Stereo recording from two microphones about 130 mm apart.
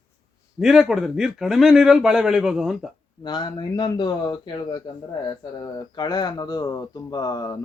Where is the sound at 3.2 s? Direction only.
35° left (ahead or behind).